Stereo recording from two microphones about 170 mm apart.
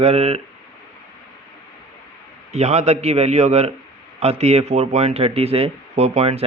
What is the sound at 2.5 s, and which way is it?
Speech, 40° right (ahead or behind).